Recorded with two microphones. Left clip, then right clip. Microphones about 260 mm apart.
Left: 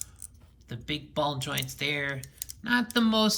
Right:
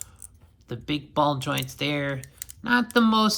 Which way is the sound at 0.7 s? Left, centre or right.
Centre.